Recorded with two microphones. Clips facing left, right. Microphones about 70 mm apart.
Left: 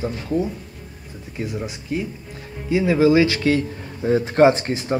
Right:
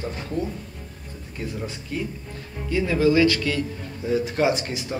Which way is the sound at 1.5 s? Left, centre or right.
Centre.